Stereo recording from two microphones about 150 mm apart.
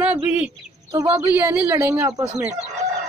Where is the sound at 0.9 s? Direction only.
15° right (ahead or behind).